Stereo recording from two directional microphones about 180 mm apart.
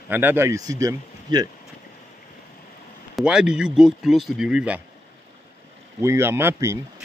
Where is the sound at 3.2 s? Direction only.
5° right (ahead or behind).